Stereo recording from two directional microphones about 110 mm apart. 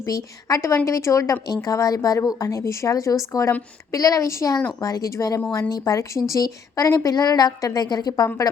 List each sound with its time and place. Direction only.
0.0 s a woman's voice: 30° left (ahead or behind)